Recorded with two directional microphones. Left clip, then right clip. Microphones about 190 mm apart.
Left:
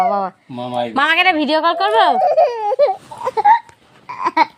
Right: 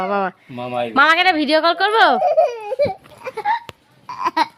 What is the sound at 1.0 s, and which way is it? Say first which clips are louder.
A woman's voice: even; 10° right (ahead or behind).